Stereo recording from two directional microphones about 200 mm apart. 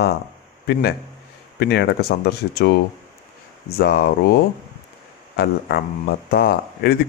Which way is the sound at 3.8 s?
50° left (ahead or behind).